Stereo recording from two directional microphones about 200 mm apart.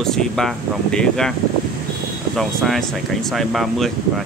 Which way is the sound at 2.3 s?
Centre (ahead or behind).